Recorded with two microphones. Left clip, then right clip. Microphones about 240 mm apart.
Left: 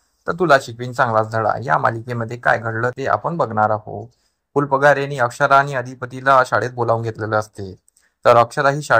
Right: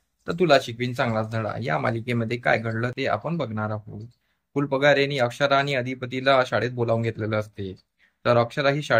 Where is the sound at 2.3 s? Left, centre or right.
Left.